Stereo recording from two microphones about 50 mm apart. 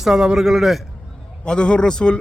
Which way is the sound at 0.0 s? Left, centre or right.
Centre.